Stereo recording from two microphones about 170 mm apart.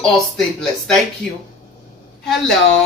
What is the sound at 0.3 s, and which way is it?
Speech, centre (ahead or behind).